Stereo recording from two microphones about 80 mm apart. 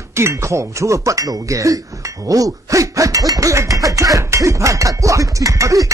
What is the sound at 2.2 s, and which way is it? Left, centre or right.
Music, right.